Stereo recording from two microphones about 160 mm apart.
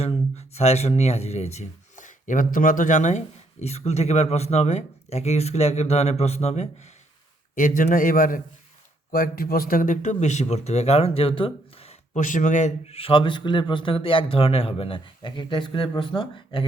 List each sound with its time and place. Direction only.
0.0 s speech: 40° left (ahead or behind)
7.5 s a man's voice: 60° left (ahead or behind); by 16.6 s 30° left (ahead or behind)